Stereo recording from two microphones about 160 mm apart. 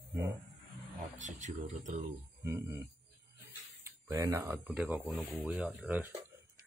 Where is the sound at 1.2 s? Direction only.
50° right (ahead or behind).